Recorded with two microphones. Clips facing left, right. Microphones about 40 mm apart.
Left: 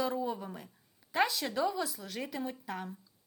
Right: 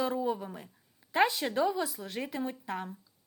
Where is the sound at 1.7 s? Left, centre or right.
Centre.